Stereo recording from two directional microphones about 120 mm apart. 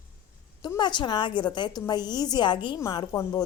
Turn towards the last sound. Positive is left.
turn(degrees=30)  # may be behind; listen again after turning